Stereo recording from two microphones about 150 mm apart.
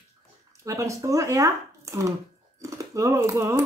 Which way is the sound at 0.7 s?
20° right (ahead or behind).